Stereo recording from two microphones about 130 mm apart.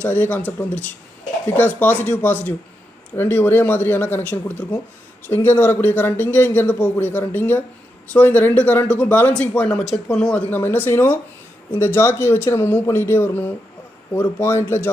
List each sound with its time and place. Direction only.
0.0 s a man's voice: 15° left (ahead or behind)